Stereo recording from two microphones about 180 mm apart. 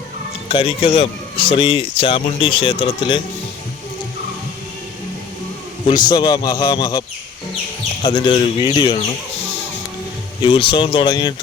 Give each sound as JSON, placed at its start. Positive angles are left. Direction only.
{"t": 0.4, "sound": "speech", "side_deg": 30}
{"t": 5.9, "sound": "a man's voice", "side_deg": 25}
{"t": 8.0, "sound": "a man's voice", "side_deg": 25}
{"t": 10.4, "sound": "a man's voice", "side_deg": 30}